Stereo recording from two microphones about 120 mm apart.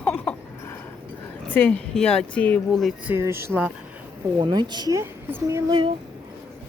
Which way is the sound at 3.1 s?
20° right (ahead or behind).